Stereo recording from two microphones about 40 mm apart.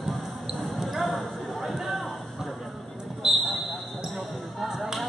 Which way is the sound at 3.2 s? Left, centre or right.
Centre.